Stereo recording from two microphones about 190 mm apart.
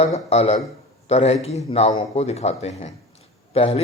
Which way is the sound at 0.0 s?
35° left (ahead or behind).